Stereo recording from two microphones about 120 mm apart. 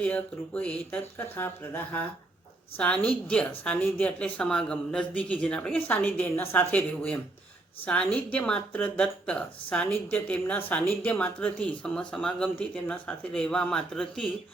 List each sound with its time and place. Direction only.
0.0 s a woman's voice: 10° left (ahead or behind)